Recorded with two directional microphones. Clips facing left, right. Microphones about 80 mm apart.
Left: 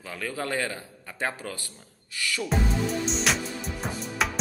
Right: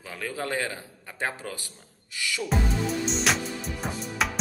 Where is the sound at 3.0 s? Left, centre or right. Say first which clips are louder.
Right 1 dB; centre.